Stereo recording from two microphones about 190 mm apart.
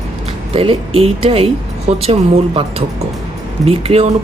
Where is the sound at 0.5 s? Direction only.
30° right (ahead or behind).